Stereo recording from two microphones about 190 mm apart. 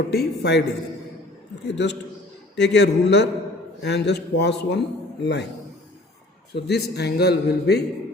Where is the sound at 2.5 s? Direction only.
65° left (ahead or behind).